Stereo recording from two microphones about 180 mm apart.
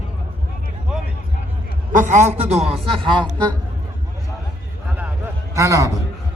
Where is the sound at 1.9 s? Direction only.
45° right (ahead or behind); by 3.3 s 25° right (ahead or behind).